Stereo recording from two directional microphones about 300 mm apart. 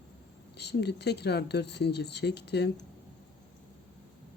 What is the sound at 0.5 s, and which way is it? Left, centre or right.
Speech, left.